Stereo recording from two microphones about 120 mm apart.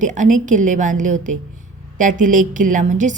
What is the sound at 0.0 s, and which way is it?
A woman's voice, 90° right.